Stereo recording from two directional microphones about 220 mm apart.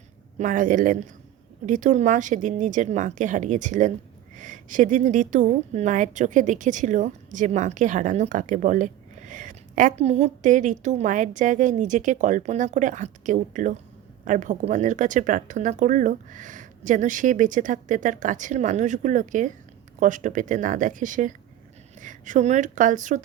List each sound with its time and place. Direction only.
0.3 s a woman's voice: 35° right (ahead or behind)